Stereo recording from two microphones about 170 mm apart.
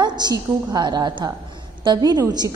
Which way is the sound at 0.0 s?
25° right (ahead or behind).